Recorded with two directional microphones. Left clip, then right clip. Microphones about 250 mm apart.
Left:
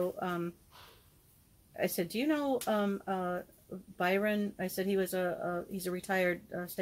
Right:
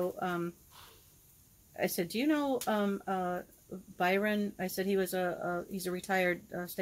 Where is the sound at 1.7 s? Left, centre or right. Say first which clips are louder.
Even; centre.